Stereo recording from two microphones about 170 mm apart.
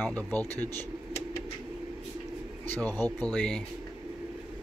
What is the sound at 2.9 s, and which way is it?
Speech, 20° right (ahead or behind).